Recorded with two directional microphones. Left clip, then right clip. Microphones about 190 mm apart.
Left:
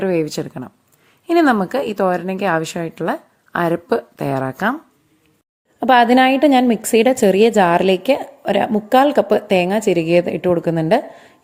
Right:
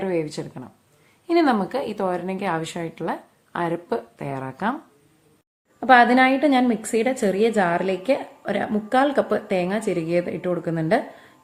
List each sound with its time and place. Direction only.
0.0 s a woman's voice: 40° left (ahead or behind)
5.8 s a woman's voice: 40° left (ahead or behind)